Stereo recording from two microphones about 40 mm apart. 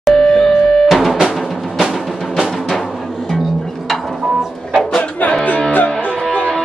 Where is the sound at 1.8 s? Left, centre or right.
Centre.